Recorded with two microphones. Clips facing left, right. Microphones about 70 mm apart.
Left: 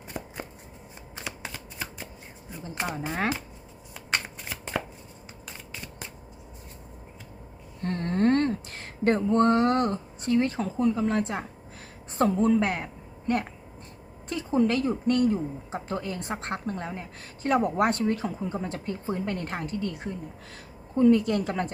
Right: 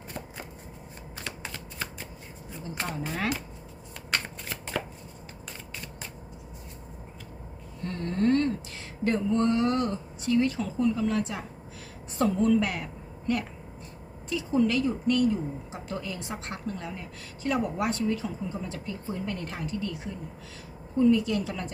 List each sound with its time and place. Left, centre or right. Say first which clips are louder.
1.5 s shuffling cards: even; centre
3.0 s speech: left 3 dB; left
4.1 s shuffling cards: left 1 dB; left
7.8 s a sound: left 3 dB; left
12.1 s a woman's voice: left 1 dB; left